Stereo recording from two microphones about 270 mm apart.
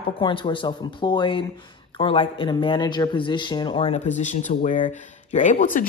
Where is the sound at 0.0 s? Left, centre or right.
Centre.